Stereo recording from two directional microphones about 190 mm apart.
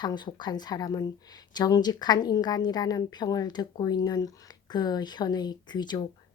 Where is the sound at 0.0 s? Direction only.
20° left (ahead or behind).